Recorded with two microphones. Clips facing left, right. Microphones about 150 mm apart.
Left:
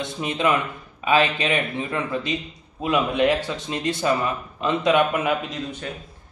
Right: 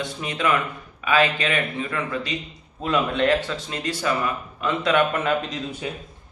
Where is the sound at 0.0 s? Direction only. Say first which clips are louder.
Left 2 dB; 20° left (ahead or behind); by 5.6 s 5° left (ahead or behind).